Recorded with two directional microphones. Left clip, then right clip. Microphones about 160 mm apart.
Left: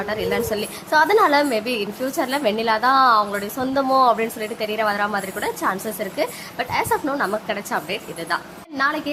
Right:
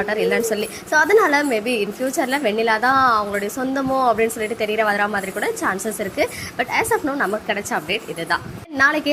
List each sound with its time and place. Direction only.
0.0 s a woman's voice: 15° right (ahead or behind)